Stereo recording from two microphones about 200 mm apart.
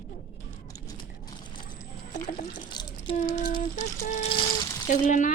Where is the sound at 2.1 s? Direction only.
40° left (ahead or behind).